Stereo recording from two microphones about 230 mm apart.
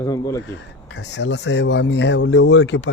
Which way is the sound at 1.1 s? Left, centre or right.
Left.